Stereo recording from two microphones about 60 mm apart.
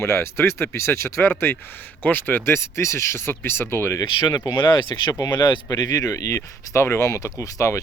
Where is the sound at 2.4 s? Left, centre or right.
Left.